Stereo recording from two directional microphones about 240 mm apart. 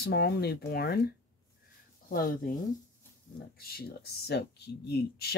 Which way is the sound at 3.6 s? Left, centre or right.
Left.